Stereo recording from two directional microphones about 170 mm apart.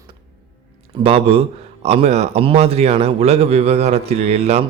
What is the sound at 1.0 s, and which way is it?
A man's voice, 35° right (ahead or behind).